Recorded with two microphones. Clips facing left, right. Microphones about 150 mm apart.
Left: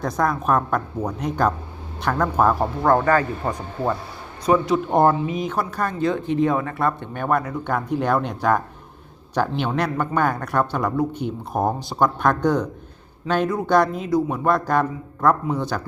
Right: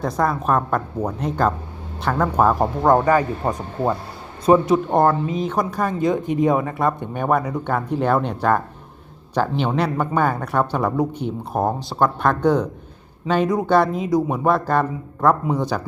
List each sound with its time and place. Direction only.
0.0 s speech: 5° right (ahead or behind)
4.6 s speech: centre (ahead or behind)
5.0 s speech: 15° left (ahead or behind)
5.5 s speech: 10° right (ahead or behind)
7.9 s speech: 5° left (ahead or behind)
9.6 s speech: 10° right (ahead or behind)
11.5 s speech: centre (ahead or behind)